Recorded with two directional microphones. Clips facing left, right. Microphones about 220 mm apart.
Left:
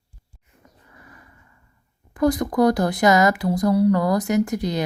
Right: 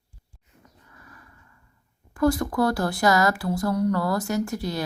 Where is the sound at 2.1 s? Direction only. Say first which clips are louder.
Left 3 dB; 20° left (ahead or behind).